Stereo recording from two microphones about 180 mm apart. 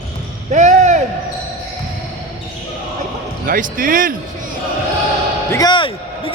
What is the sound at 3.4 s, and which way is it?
Speech, 50° right (ahead or behind).